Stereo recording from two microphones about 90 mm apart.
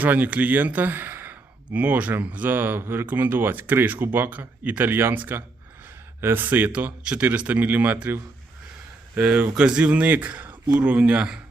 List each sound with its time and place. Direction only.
0.0 s speech: 20° right (ahead or behind)